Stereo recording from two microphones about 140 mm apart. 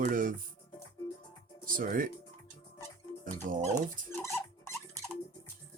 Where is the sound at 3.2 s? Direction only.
70° right (ahead or behind).